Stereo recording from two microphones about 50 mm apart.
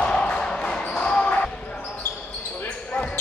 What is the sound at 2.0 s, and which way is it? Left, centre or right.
Basketball bounce, left.